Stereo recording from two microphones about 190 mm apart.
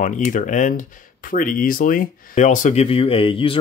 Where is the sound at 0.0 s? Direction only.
45° left (ahead or behind).